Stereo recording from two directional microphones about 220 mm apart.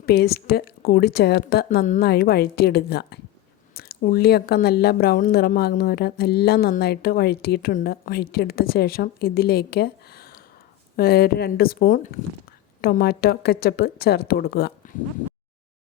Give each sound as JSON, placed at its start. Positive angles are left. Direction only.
{"t": 0.0, "sound": "speech", "side_deg": 45}